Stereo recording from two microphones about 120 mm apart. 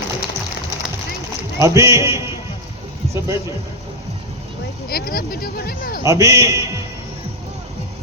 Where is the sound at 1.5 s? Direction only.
25° right (ahead or behind).